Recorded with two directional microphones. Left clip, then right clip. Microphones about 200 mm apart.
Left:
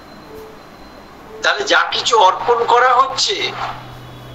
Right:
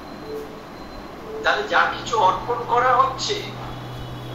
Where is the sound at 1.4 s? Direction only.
50° left (ahead or behind).